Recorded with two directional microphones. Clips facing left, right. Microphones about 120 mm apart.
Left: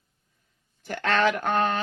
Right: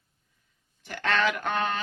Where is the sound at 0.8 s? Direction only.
45° left (ahead or behind).